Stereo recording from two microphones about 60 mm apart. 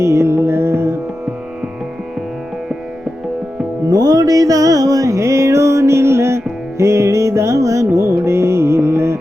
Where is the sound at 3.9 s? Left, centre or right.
Right.